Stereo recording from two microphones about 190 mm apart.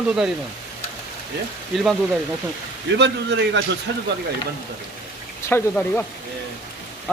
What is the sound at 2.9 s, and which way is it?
A man's voice, 65° right (ahead or behind).